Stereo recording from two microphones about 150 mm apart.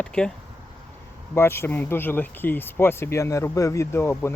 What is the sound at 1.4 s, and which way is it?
Speech, 15° left (ahead or behind).